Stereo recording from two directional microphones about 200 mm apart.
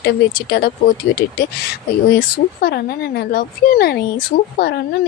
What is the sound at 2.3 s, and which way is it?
A woman's voice, 50° left (ahead or behind).